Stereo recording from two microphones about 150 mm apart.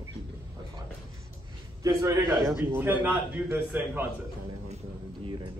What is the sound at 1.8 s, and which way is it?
A man's voice, 25° right (ahead or behind).